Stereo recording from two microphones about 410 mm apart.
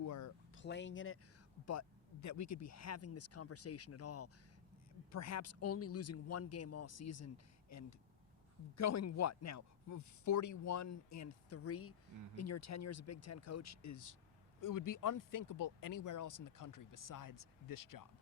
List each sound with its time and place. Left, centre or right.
0.0 s a sound: left
0.5 s speech: left
1.6 s speech: left